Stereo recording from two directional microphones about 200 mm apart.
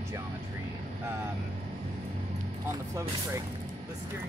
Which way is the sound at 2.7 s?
15° right (ahead or behind).